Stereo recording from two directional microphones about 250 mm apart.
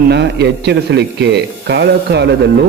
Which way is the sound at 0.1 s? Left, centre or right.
Right.